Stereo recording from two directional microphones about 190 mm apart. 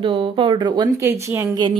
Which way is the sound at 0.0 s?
25° right (ahead or behind).